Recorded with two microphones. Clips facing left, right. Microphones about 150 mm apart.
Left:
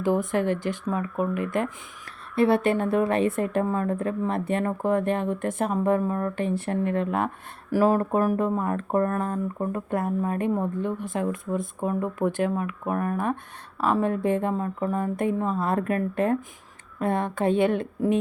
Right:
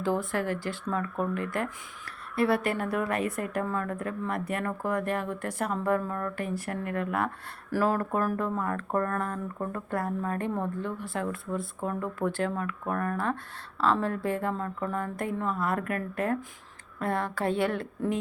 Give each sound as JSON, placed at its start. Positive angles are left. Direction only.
{"t": 0.0, "sound": "speech", "side_deg": 20}